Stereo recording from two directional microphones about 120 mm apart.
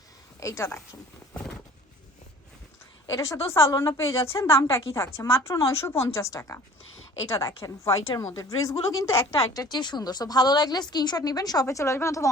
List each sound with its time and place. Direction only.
0.3 s speech: 25° left (ahead or behind)
3.1 s a woman's voice: 25° left (ahead or behind)